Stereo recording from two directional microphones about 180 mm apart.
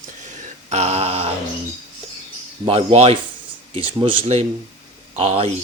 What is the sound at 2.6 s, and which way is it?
Speech, 30° right (ahead or behind).